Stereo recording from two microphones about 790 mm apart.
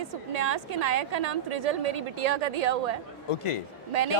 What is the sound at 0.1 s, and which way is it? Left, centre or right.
A woman's voice, right.